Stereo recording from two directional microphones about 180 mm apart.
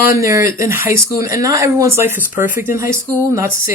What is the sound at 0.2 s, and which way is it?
Speech, 15° right (ahead or behind).